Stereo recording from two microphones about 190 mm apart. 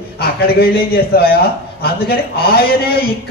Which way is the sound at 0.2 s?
55° left (ahead or behind).